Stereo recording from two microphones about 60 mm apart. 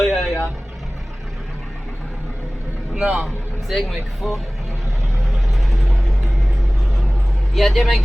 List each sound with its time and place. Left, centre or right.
0.0 s vehicle: centre
2.9 s a man's voice: centre
3.2 s speech: centre
7.5 s speech: centre